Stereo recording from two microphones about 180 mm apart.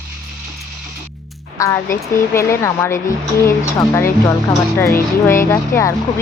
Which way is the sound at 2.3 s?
15° left (ahead or behind).